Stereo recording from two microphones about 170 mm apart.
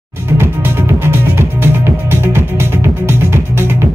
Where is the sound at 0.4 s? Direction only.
15° right (ahead or behind).